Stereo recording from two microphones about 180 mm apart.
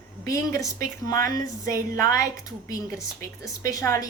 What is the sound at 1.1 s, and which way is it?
A woman's voice, 20° left (ahead or behind).